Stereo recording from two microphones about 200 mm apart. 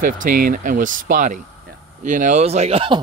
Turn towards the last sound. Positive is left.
turn(degrees=-25)  # may be behind; listen again after turning